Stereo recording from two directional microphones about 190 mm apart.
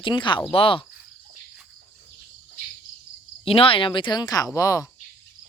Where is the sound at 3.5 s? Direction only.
30° left (ahead or behind).